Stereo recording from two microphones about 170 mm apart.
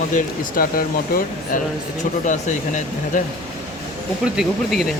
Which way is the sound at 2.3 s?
50° left (ahead or behind).